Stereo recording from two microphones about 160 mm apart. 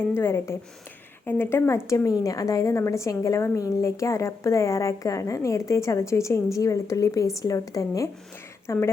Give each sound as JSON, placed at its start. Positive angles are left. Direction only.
{"t": 0.1, "sound": "a woman's voice", "side_deg": 15}